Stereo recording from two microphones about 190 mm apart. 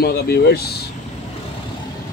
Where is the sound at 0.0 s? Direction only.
60° left (ahead or behind).